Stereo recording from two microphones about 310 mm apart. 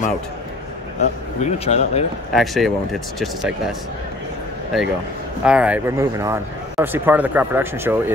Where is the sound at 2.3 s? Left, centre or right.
Centre.